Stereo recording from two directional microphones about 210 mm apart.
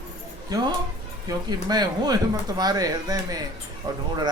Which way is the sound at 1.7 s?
20° right (ahead or behind).